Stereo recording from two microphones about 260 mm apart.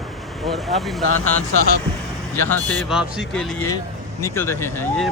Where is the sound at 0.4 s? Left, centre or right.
Centre.